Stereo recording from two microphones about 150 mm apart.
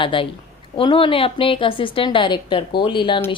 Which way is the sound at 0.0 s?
35° left (ahead or behind).